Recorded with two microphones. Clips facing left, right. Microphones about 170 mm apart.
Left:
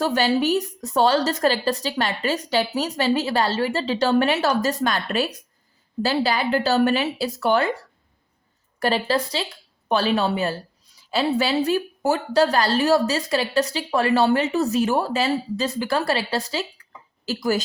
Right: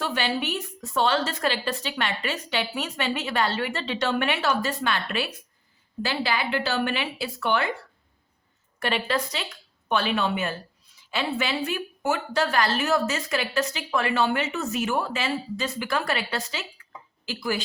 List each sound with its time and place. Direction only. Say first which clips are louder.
0.0 s speech: left 7 dB; 40° left (ahead or behind)